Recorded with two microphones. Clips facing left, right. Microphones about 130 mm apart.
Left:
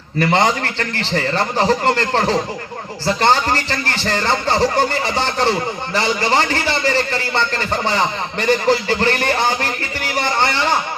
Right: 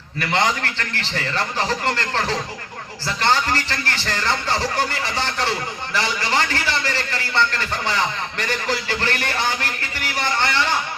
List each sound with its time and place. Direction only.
0.2 s a man's voice: 35° left (ahead or behind)